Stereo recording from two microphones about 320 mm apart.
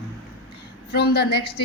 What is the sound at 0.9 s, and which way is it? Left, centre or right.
Speech, left.